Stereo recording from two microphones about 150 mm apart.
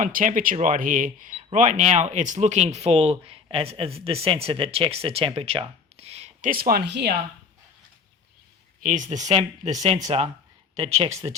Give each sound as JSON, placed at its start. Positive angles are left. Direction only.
{"t": 0.0, "sound": "speech", "side_deg": -60}
{"t": 6.0, "sound": "a sound", "side_deg": -45}
{"t": 6.4, "sound": "speech", "side_deg": -75}
{"t": 8.8, "sound": "speech", "side_deg": -60}